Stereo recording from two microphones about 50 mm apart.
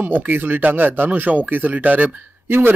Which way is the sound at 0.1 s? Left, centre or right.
Right.